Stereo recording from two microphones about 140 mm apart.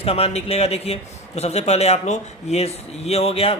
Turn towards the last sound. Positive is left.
turn(degrees=45)  # may be behind; listen again after turning